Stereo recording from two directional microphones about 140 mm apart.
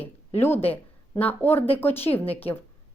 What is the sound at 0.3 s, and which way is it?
Speech, 15° left (ahead or behind).